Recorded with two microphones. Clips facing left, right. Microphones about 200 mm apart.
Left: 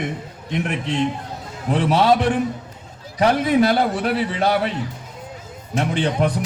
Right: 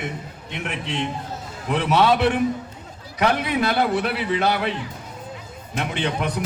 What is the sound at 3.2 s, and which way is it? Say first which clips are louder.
A man's voice: left 5 dB; 40° left (ahead or behind).